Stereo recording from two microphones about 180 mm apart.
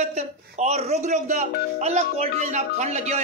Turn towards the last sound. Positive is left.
turn(degrees=-35)  # may be behind; listen again after turning